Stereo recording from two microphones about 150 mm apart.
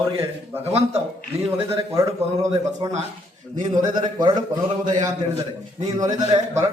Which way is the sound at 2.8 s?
35° right (ahead or behind).